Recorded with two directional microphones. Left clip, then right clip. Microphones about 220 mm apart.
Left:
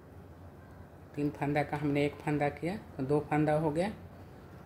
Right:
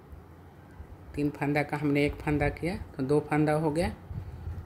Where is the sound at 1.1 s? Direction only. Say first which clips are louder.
Right 3 dB; 20° right (ahead or behind).